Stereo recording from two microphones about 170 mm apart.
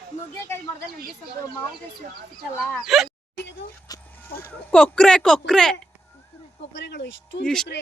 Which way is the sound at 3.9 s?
20° left (ahead or behind).